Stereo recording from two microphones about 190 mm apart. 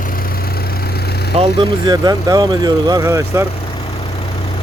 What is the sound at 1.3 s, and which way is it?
Speech, 25° right (ahead or behind).